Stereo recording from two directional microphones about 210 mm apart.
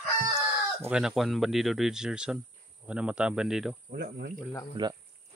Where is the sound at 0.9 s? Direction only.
Centre (ahead or behind).